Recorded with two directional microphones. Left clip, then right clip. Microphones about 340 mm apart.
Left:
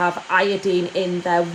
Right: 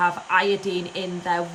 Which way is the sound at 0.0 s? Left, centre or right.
Centre.